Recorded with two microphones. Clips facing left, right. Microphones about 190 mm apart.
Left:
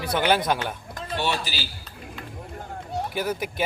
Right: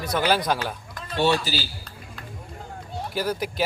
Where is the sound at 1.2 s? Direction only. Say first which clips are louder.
Right 7 dB; 45° right (ahead or behind).